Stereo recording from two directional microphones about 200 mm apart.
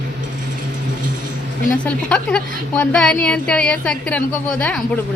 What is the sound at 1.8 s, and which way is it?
A woman's voice, 5° left (ahead or behind).